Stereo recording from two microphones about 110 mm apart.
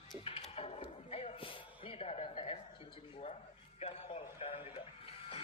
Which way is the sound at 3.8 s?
65° left (ahead or behind).